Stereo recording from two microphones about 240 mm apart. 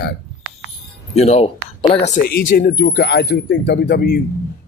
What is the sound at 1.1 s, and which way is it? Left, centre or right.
Speech, left.